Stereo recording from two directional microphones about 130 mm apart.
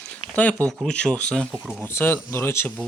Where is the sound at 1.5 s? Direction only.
10° right (ahead or behind).